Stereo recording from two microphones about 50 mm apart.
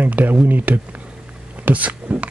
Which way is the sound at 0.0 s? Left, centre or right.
Right.